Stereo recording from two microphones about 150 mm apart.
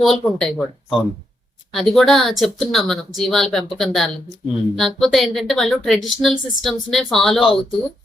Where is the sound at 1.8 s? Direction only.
Centre (ahead or behind).